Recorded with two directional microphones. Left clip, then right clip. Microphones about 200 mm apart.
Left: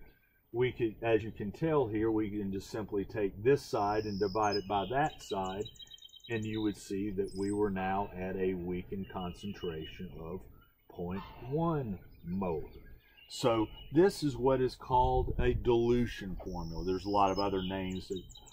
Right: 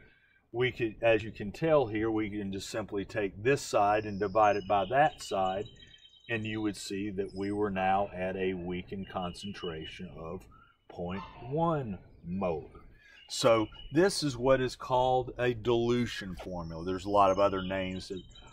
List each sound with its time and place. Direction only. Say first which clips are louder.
0.6 s speech: right 2 dB; centre (ahead or behind)
11.0 s speech: right 2 dB; centre (ahead or behind)
13.4 s speech: right 5 dB; 20° right (ahead or behind)